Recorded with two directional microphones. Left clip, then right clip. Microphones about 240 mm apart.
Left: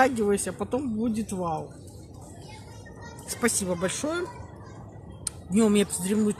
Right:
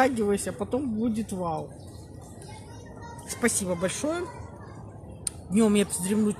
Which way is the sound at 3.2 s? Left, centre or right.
Centre.